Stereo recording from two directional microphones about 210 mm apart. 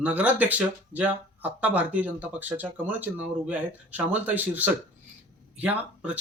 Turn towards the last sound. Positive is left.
turn(degrees=-5)  # may be behind; listen again after turning